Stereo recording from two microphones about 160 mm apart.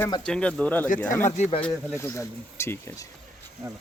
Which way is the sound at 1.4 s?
35° left (ahead or behind).